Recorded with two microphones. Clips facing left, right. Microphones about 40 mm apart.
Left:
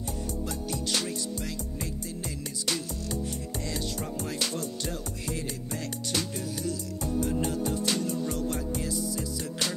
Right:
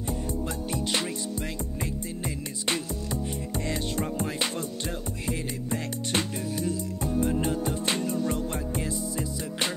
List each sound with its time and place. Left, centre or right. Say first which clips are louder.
1.8 s music: right 3 dB; right